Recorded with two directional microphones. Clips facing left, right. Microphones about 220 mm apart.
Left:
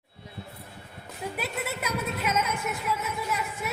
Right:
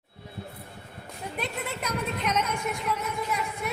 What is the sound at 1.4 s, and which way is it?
A woman's voice, 5° left (ahead or behind).